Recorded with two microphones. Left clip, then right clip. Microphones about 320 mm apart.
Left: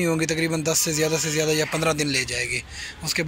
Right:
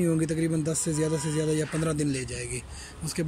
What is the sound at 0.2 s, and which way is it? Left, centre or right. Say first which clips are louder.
Speech: left 5 dB; centre.